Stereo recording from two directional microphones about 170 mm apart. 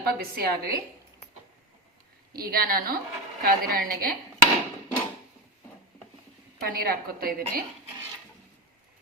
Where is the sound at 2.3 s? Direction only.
60° right (ahead or behind).